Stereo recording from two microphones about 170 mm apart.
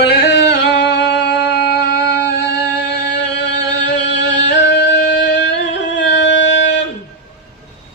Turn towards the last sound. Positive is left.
turn(degrees=90)